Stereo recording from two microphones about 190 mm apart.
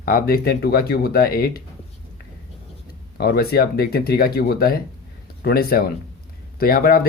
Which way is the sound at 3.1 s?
55° left (ahead or behind).